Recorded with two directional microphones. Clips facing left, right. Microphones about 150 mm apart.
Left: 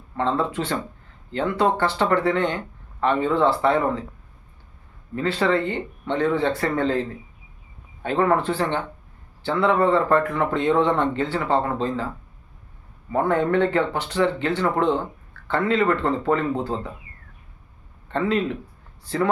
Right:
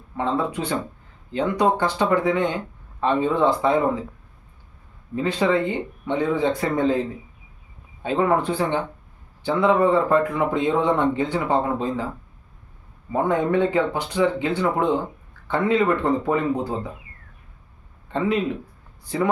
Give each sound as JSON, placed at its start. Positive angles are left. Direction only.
{"t": 0.2, "sound": "speech", "side_deg": -10}
{"t": 5.1, "sound": "speech", "side_deg": -15}
{"t": 13.1, "sound": "speech", "side_deg": -15}
{"t": 18.1, "sound": "speech", "side_deg": -15}